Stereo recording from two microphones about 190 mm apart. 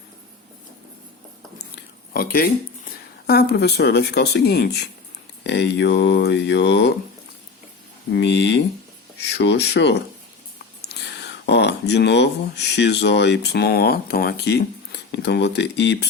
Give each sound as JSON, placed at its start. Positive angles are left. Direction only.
{"t": 2.1, "sound": "speech", "side_deg": 50}
{"t": 8.1, "sound": "speech", "side_deg": 65}